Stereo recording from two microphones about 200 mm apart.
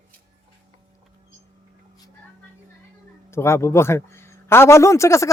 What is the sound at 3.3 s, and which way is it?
A man's voice, 15° left (ahead or behind).